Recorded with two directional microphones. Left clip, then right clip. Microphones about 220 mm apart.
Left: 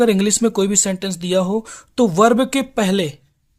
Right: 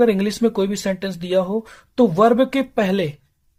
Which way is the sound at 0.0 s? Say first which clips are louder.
Left 1 dB; 35° left (ahead or behind).